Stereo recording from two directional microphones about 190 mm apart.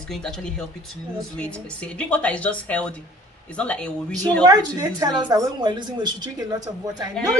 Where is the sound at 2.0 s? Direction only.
5° left (ahead or behind).